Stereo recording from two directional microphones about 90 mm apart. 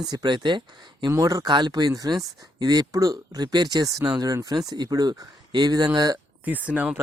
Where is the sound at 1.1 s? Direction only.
40° right (ahead or behind).